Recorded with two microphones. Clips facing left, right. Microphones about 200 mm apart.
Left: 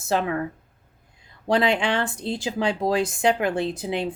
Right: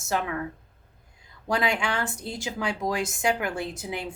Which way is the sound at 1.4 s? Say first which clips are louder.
Left 5 dB; 30° left (ahead or behind).